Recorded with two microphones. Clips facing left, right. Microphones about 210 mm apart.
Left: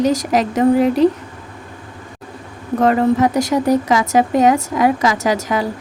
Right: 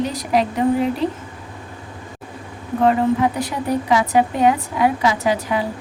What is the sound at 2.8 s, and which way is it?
A woman's voice, 85° left.